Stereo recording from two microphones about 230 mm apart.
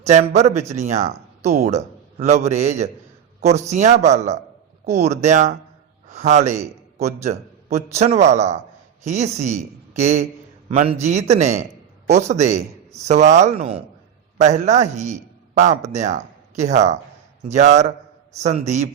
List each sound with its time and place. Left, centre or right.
0.0 s a man's voice: right